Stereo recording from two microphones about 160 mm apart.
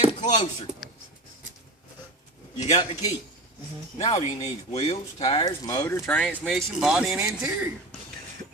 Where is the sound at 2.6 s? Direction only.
45° left (ahead or behind).